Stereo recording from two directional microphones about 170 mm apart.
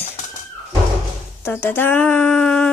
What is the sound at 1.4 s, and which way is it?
A woman's voice, 15° left (ahead or behind).